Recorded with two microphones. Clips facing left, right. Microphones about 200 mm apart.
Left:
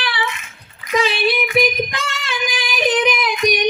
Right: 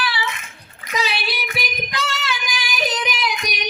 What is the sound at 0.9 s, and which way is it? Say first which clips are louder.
Female singing: left 7 dB; 50° left (ahead or behind).